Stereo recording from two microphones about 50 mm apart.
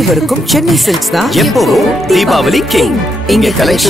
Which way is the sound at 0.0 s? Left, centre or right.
Centre.